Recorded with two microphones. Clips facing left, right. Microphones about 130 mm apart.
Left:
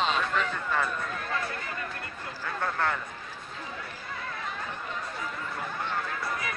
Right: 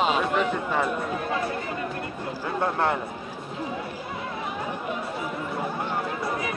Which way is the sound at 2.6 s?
25° right (ahead or behind).